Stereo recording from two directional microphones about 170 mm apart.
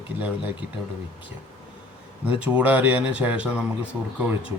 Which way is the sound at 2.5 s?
10° right (ahead or behind).